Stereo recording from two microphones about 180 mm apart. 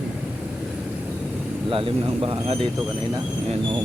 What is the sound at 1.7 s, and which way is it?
Speech, 30° right (ahead or behind).